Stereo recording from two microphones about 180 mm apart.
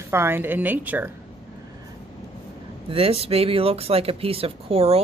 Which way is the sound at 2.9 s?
30° right (ahead or behind).